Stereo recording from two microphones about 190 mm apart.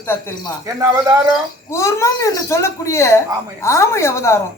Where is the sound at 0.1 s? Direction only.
10° left (ahead or behind).